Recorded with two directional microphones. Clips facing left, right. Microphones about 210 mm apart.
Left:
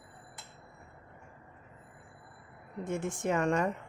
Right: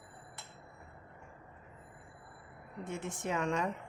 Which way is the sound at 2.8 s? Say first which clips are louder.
Left 6 dB; 50° left (ahead or behind).